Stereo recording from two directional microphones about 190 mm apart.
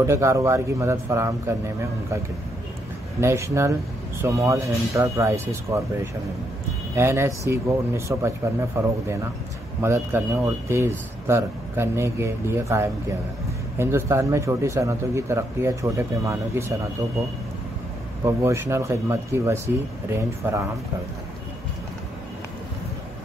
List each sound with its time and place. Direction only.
0.0 s speech: 15° right (ahead or behind)
3.2 s speech: 15° right (ahead or behind)
7.0 s speech: 15° right (ahead or behind)
18.2 s speech: 15° right (ahead or behind)